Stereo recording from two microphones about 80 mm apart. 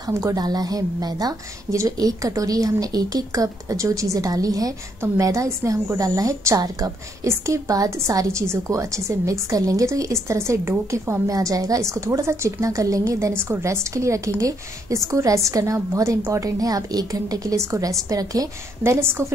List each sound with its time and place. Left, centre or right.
0.1 s a woman's voice: right
5.0 s a woman's voice: right
13.3 s a woman's voice: right
18.8 s a woman's voice: right